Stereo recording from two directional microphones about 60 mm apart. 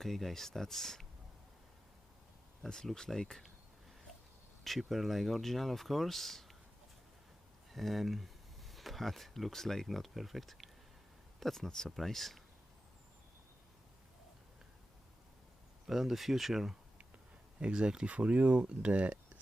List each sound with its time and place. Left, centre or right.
0.0 s speech: centre
2.6 s speech: centre
4.6 s speech: centre
7.7 s speech: centre
15.9 s speech: centre
17.6 s speech: centre